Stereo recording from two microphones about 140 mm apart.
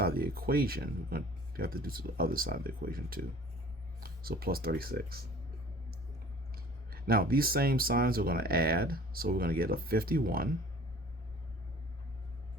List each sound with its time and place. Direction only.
0.0 s speech: 90° right
6.9 s speech: 90° right